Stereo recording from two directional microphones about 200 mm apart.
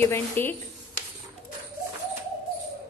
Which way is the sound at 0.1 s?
10° left (ahead or behind).